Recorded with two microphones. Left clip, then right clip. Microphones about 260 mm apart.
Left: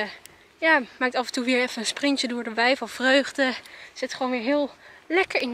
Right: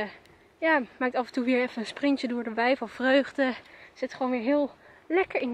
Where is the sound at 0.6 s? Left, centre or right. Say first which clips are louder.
Left 4 dB; centre.